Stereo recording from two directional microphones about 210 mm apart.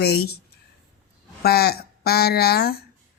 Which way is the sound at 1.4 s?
50° left (ahead or behind).